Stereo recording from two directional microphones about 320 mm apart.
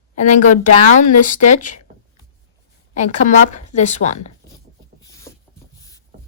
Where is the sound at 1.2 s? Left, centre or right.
Left.